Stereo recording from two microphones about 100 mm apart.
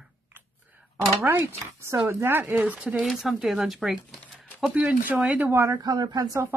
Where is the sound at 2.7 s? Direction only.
5° right (ahead or behind).